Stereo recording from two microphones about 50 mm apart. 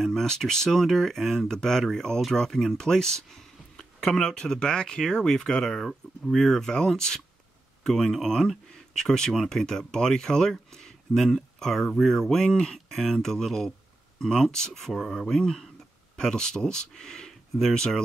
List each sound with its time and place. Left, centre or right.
0.0 s speech: centre